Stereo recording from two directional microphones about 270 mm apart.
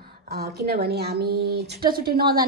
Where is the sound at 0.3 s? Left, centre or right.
Right.